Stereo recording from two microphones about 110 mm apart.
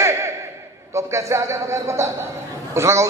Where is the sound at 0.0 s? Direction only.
25° right (ahead or behind).